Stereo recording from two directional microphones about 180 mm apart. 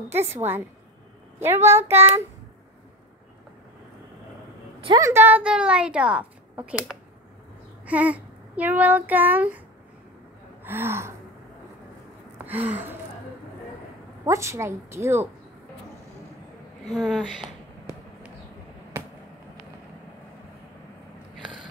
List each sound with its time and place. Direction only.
0.1 s a woman's voice: 15° right (ahead or behind)
4.8 s a woman's voice: 20° right (ahead or behind)
10.6 s speech: 10° right (ahead or behind)
12.4 s a woman's voice: 10° right (ahead or behind)
14.2 s a woman's voice: 15° right (ahead or behind)
16.9 s speech: 5° left (ahead or behind)